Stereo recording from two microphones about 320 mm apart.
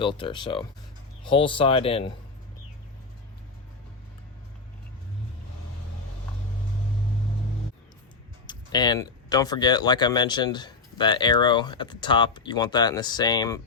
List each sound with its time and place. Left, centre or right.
0.0 s speech: centre
8.4 s speech: centre